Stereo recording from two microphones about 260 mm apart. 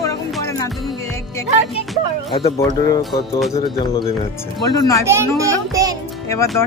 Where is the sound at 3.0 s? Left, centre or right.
Centre.